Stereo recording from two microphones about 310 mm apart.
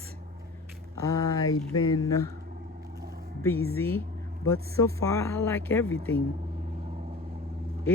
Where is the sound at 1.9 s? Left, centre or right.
Centre.